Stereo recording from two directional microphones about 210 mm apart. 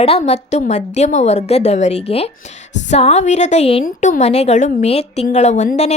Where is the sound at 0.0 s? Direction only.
30° left (ahead or behind).